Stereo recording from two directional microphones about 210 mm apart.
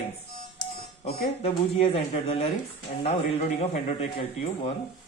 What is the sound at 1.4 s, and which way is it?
Speech, 25° left (ahead or behind).